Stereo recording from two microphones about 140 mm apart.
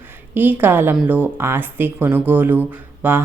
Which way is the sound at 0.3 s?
15° right (ahead or behind).